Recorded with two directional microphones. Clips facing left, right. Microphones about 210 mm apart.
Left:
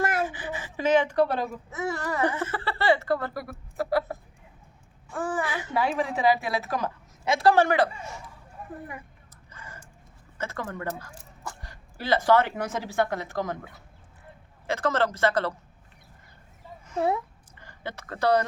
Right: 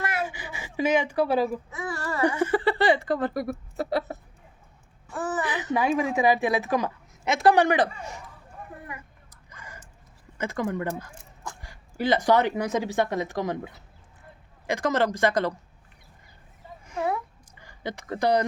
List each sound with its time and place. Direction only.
0.0 s a sound: 45° left (ahead or behind)
0.3 s speech: 10° right (ahead or behind)
1.7 s speech: 25° left (ahead or behind)
2.2 s speech: 15° right (ahead or behind)
5.2 s a child's voice: 10° left (ahead or behind)
5.7 s speech: 15° right (ahead or behind)
9.5 s a sound: 15° right (ahead or behind)
10.3 s a woman's voice: 15° right (ahead or behind)
14.7 s speech: 15° right (ahead or behind)
17.6 s speech: 15° right (ahead or behind)